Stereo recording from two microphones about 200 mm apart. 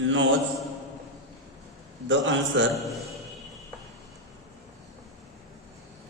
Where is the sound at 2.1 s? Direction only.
65° right (ahead or behind).